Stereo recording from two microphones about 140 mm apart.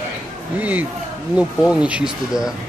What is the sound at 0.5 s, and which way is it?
Speech, 10° right (ahead or behind).